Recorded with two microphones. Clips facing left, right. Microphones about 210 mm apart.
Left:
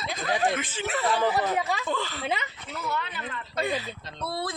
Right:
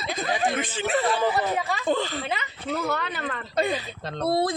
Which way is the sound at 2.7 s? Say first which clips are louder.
Right 4 dB; 85° right.